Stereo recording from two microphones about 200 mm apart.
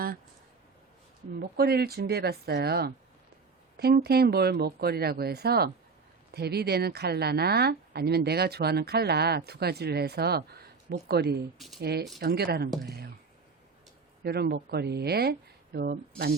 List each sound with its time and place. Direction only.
1.4 s speech: 50° right (ahead or behind)
11.5 s speech: centre (ahead or behind)
11.8 s speech: 50° right (ahead or behind)
14.3 s speech: 55° right (ahead or behind)